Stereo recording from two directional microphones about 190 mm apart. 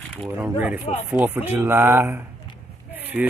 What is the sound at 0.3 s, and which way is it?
Speech, 10° right (ahead or behind).